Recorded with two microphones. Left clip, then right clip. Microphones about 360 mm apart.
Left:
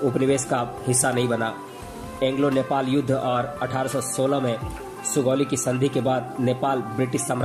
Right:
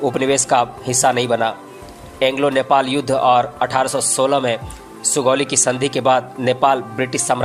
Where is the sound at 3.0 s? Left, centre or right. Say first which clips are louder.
Right 9 dB; right.